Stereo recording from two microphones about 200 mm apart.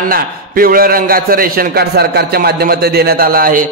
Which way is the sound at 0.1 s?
45° right (ahead or behind).